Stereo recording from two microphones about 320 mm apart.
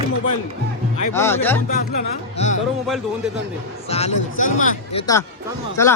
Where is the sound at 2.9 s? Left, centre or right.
Centre.